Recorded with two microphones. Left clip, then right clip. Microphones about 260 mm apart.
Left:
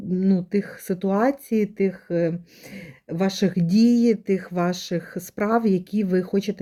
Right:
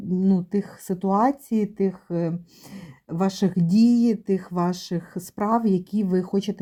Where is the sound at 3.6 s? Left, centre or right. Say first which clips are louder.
Even; centre.